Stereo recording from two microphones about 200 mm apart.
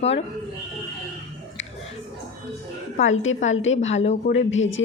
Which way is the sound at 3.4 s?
75° left (ahead or behind).